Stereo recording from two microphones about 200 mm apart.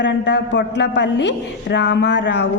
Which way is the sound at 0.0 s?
60° left (ahead or behind).